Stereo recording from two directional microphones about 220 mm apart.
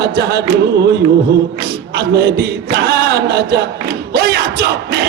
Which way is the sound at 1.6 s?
45° right (ahead or behind).